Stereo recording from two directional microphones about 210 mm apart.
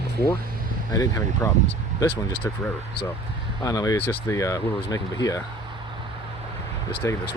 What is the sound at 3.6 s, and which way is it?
Speech, 15° left (ahead or behind).